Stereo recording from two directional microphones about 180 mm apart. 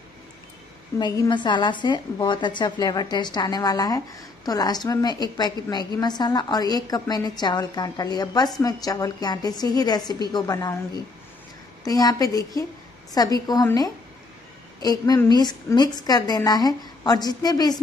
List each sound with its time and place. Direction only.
0.9 s a woman's voice: 20° left (ahead or behind)